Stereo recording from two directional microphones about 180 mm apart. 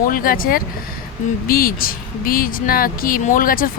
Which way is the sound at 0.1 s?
50° left (ahead or behind).